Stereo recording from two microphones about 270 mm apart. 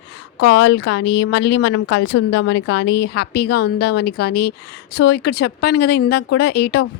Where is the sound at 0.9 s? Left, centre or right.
Left.